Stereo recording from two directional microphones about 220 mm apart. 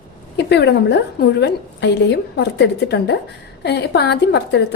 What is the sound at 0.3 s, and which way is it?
A woman's voice, 50° left (ahead or behind).